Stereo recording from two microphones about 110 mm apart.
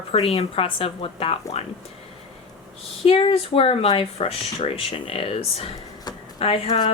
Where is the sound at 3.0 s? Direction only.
60° left (ahead or behind).